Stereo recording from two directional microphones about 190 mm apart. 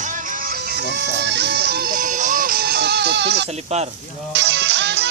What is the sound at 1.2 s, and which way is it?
Music, 65° right (ahead or behind).